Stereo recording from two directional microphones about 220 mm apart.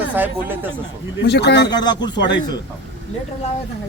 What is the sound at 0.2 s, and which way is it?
Speech, 10° right (ahead or behind).